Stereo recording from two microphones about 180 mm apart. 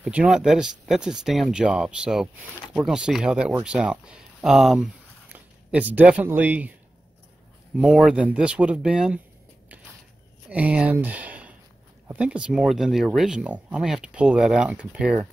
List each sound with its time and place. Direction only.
0.0 s speech: 5° right (ahead or behind)
7.7 s speech: 5° right (ahead or behind)
10.5 s speech: 5° right (ahead or behind)